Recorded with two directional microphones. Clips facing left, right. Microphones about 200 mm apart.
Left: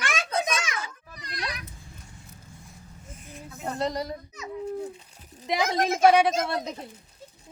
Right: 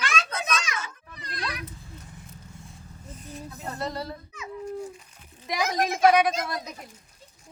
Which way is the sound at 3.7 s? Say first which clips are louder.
Left 4 dB; 15° left (ahead or behind).